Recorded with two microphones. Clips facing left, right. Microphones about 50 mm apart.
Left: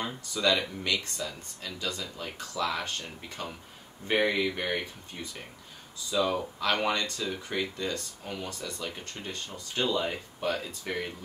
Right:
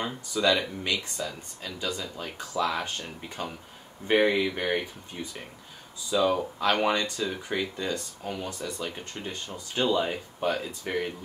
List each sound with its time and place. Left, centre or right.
0.0 s speech: centre
8.5 s speech: right
9.1 s speech: centre